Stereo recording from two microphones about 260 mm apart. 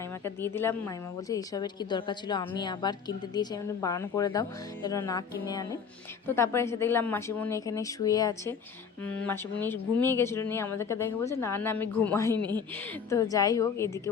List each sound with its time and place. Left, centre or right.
0.3 s a woman's voice: centre
12.3 s speech: centre
13.1 s a woman's voice: centre